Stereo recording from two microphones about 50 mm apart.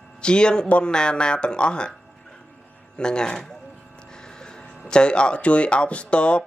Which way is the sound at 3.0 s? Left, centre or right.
Centre.